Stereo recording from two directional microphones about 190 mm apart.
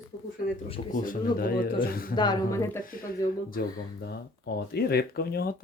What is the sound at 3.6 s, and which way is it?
Speech, 55° left (ahead or behind).